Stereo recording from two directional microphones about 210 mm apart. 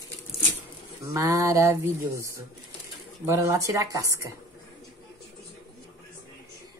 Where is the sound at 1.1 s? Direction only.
15° right (ahead or behind).